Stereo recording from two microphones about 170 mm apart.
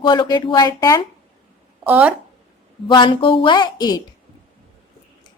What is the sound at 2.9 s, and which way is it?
A woman's voice, 30° left (ahead or behind).